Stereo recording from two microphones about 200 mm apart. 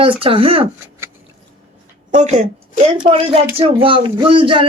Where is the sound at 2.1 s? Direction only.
35° right (ahead or behind).